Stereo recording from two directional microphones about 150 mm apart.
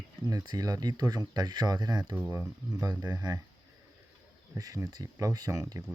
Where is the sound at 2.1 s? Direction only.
15° right (ahead or behind).